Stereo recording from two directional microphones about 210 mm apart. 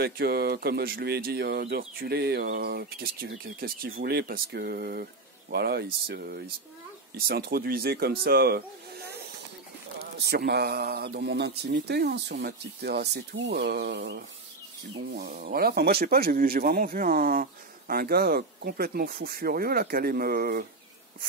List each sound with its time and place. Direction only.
0.0 s speech: 50° right (ahead or behind)